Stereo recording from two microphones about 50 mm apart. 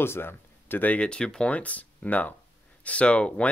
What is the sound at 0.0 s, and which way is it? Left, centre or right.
Speech, left.